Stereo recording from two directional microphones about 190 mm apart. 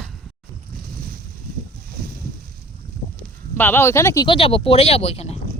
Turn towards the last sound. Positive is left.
turn(degrees=35)  # may be behind; listen again after turning